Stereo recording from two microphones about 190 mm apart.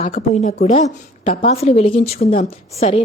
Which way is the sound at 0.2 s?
45° left (ahead or behind).